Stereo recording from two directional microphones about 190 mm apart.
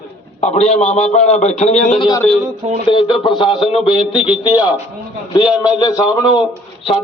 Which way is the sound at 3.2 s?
25° left (ahead or behind).